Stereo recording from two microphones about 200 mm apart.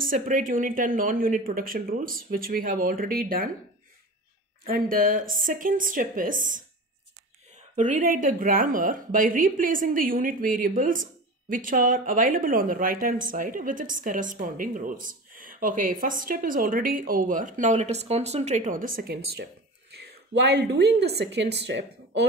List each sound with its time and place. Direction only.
0.0 s speech: 40° right (ahead or behind)
4.6 s speech: 45° right (ahead or behind)
7.7 s speech: 40° right (ahead or behind); by 22.2 s 60° right (ahead or behind)